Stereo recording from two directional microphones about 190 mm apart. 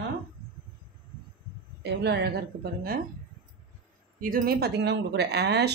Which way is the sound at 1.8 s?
60° right (ahead or behind).